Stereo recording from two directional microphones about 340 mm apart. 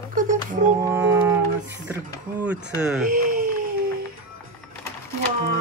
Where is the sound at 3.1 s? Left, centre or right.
Right.